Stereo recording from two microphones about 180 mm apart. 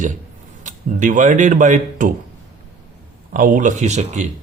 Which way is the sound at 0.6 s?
45° right (ahead or behind).